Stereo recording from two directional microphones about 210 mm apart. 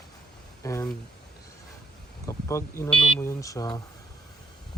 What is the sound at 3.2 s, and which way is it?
Speech, 15° left (ahead or behind).